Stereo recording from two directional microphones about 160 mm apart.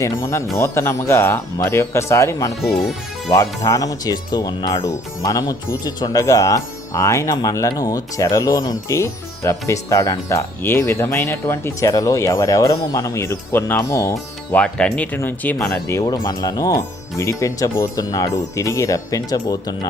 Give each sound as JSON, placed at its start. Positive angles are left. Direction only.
{"t": 0.0, "sound": "speech", "side_deg": 15}